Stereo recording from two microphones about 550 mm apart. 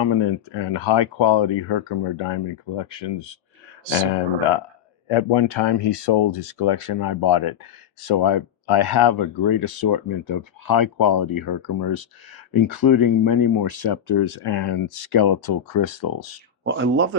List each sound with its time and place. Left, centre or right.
0.0 s speech: left
5.0 s speech: left
16.6 s speech: centre